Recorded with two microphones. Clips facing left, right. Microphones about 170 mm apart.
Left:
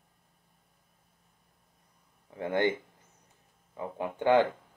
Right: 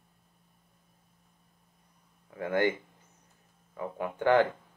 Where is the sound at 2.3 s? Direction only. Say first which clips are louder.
Even; 25° left (ahead or behind).